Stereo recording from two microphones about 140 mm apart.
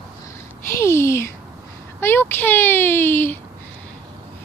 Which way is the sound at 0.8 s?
20° left (ahead or behind).